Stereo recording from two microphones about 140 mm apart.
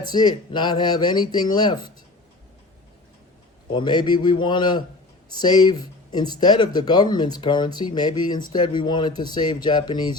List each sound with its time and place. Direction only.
0.1 s speech: 30° left (ahead or behind)
3.7 s speech: 35° left (ahead or behind)